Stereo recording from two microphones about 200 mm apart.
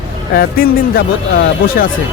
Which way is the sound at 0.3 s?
50° left (ahead or behind).